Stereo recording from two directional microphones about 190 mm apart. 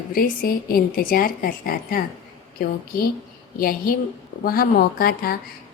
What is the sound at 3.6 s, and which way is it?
A woman's voice, 50° left (ahead or behind).